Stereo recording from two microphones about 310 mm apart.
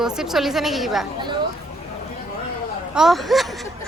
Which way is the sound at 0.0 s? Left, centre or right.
Centre.